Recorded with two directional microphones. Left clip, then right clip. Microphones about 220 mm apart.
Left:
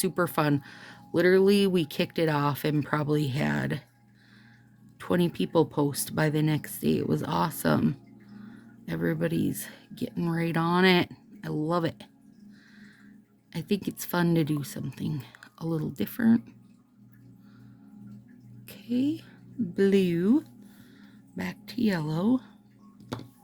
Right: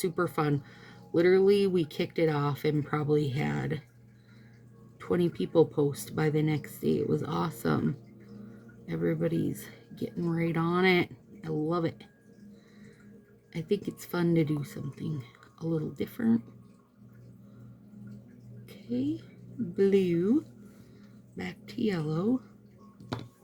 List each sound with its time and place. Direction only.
0.0 s speech: 50° left (ahead or behind)
4.9 s speech: 50° left (ahead or behind)
13.5 s speech: 50° left (ahead or behind)
18.7 s speech: 50° left (ahead or behind)
21.3 s speech: 50° left (ahead or behind)